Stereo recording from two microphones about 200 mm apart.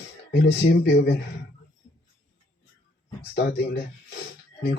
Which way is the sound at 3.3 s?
55° left (ahead or behind).